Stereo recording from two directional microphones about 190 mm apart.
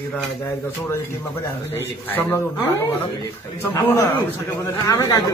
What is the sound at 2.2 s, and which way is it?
Speech, 10° left (ahead or behind).